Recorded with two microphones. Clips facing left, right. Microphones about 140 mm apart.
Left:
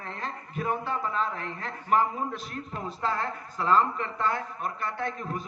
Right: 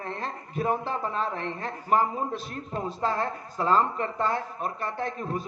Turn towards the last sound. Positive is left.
turn(degrees=-35)  # may be behind; listen again after turning